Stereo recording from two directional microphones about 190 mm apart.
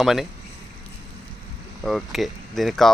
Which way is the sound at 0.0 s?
Centre (ahead or behind).